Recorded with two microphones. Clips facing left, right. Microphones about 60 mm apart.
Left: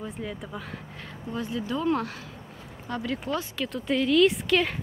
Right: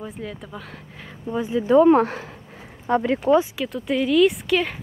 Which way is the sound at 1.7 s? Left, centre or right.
Right.